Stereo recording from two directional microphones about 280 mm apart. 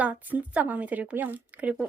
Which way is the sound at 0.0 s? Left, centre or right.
Centre.